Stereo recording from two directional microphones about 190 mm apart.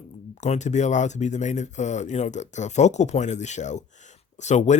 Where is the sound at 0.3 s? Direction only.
40° left (ahead or behind).